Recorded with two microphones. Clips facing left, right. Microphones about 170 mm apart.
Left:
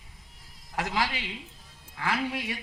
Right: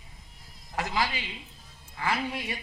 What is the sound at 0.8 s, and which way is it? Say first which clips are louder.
Speech: even; 75° left (ahead or behind).